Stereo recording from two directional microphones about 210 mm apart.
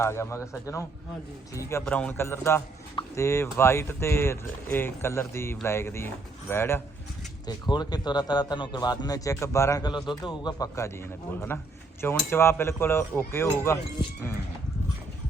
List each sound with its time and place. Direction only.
0.0 s a man's voice: 15° left (ahead or behind)